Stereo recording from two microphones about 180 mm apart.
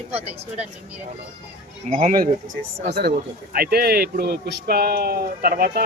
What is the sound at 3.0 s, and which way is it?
A man's voice, 60° right (ahead or behind).